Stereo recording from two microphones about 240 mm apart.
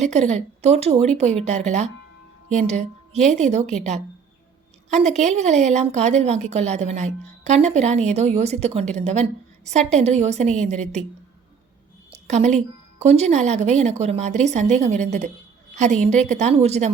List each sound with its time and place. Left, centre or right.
0.0 s a woman's voice: right
3.7 s a woman's voice: centre
4.9 s a woman's voice: right
12.1 s a sound: right
13.0 s a woman's voice: right